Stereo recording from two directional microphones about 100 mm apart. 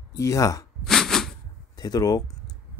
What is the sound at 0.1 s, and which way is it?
Speech, 30° left (ahead or behind).